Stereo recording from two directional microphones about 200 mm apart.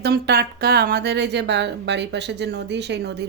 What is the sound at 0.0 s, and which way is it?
Speech, 55° right (ahead or behind).